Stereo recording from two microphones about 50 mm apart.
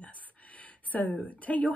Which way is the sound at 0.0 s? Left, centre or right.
Left.